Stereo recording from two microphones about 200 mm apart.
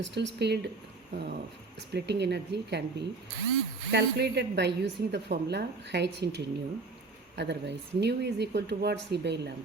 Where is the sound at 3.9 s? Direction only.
55° right (ahead or behind).